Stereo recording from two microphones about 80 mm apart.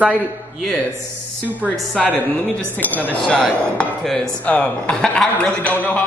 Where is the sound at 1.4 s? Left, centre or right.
Right.